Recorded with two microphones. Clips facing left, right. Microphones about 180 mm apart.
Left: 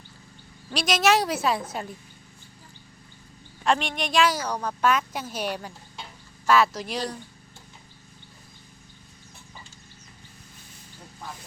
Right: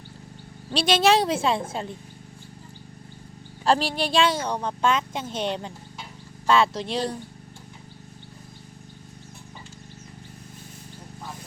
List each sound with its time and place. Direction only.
0.7 s a woman's voice: 30° right (ahead or behind)
3.6 s a woman's voice: 35° right (ahead or behind)